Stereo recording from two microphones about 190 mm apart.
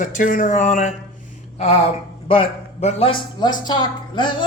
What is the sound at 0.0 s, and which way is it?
Speech, 45° left (ahead or behind).